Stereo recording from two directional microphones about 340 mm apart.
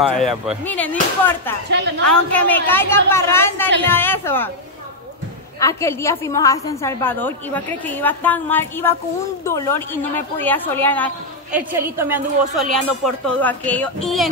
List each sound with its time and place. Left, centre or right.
0.0 s speech: centre
1.7 s a woman's voice: right
2.0 s a woman's voice: centre
5.6 s a woman's voice: centre
11.5 s speech: centre
13.0 s speech: centre